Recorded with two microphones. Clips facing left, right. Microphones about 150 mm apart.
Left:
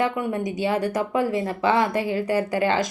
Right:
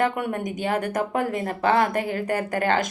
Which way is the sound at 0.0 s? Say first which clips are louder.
Even; 50° right (ahead or behind).